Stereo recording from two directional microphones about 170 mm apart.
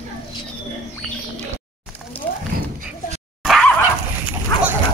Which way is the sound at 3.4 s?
Centre (ahead or behind).